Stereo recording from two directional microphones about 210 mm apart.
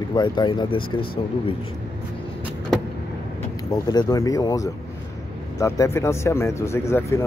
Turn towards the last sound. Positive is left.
turn(degrees=15)  # may be behind; listen again after turning